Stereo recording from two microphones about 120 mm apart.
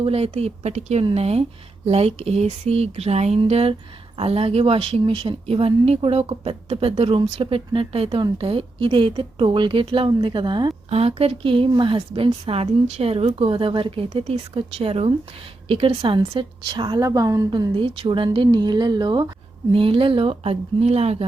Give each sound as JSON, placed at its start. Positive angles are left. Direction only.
{"t": 0.0, "sound": "speech", "side_deg": -55}
{"t": 1.1, "sound": "a woman's voice", "side_deg": -60}
{"t": 10.8, "sound": "a woman's voice", "side_deg": -60}
{"t": 17.1, "sound": "a woman's voice", "side_deg": -25}
{"t": 17.5, "sound": "a woman's voice", "side_deg": -40}
{"t": 18.3, "sound": "a woman's voice", "side_deg": -35}
{"t": 19.7, "sound": "speech", "side_deg": -50}